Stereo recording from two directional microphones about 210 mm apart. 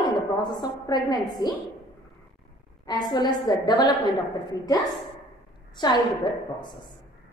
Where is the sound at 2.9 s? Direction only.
20° left (ahead or behind).